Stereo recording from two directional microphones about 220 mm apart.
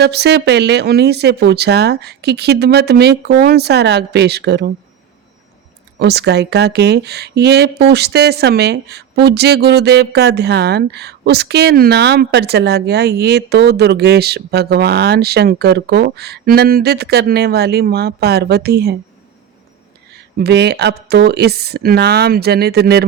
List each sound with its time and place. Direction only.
0.0 s speech: 50° right (ahead or behind)
6.0 s speech: 50° right (ahead or behind)
20.1 s speech: 50° right (ahead or behind)